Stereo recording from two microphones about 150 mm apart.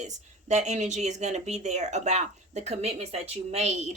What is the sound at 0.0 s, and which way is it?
Speech, 50° right (ahead or behind).